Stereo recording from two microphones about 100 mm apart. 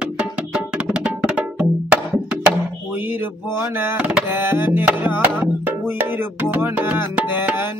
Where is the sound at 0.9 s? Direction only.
10° right (ahead or behind).